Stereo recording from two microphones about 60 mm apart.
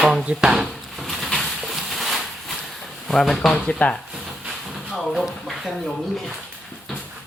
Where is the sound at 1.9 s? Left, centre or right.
Centre.